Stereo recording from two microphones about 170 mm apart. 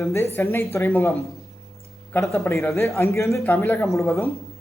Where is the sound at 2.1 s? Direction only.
15° left (ahead or behind).